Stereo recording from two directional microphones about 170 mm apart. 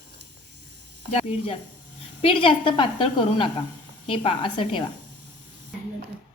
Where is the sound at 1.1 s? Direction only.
35° left (ahead or behind).